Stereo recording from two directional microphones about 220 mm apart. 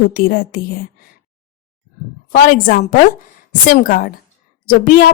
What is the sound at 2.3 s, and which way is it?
A woman's voice, 40° left (ahead or behind).